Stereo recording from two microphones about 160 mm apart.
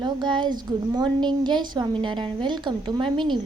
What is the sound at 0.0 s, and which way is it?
A woman's voice, 30° right (ahead or behind).